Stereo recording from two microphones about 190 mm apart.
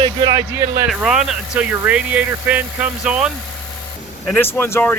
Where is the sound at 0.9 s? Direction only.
5° right (ahead or behind).